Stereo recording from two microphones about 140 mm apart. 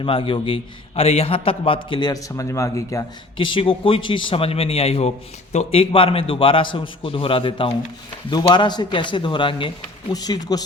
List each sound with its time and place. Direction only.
0.0 s a man's voice: 40° left (ahead or behind); by 3.1 s 25° left (ahead or behind)
3.3 s a man's voice: 35° left (ahead or behind)